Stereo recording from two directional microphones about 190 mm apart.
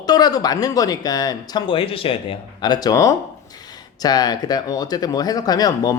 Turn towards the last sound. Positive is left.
turn(degrees=20)  # may be behind; listen again after turning